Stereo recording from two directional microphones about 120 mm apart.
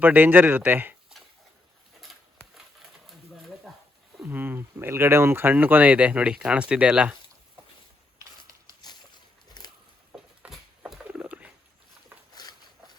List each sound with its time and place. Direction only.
0.0 s speech: 15° right (ahead or behind)
2.6 s bird: centre (ahead or behind)
4.2 s speech: 15° right (ahead or behind)
8.4 s a sound: 35° left (ahead or behind)
10.1 s a sound: 5° right (ahead or behind)
12.3 s walk: 35° left (ahead or behind)